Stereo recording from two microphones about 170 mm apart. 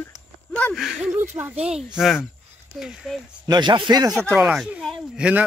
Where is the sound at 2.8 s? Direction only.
Centre (ahead or behind).